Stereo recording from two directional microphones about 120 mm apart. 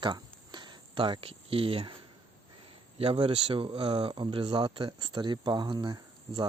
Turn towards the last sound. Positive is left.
turn(degrees=-40)  # may be behind; listen again after turning